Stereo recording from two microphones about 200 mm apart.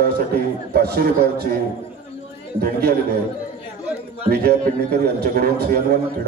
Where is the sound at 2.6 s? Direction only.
50° right (ahead or behind).